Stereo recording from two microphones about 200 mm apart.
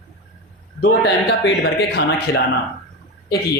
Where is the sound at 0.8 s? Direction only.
55° left (ahead or behind).